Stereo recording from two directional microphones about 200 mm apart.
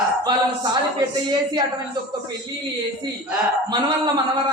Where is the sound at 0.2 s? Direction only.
20° right (ahead or behind).